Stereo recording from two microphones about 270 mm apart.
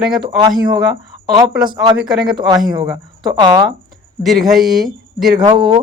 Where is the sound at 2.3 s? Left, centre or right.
Centre.